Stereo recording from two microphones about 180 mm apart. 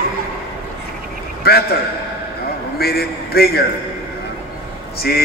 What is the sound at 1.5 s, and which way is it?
Speech, 60° left (ahead or behind).